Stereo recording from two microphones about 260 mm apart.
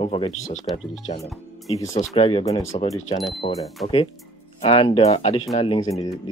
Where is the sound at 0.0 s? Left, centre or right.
Centre.